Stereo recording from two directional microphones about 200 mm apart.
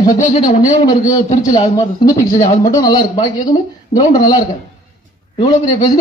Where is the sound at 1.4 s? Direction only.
20° left (ahead or behind).